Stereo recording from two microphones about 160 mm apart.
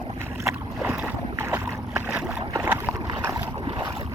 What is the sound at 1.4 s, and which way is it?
Boat, 15° right (ahead or behind).